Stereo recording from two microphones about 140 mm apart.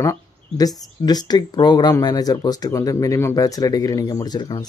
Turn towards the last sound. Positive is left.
turn(degrees=30)  # may be behind; listen again after turning